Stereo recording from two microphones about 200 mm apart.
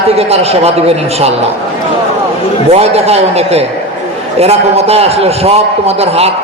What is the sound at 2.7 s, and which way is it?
A man's voice, 30° right (ahead or behind).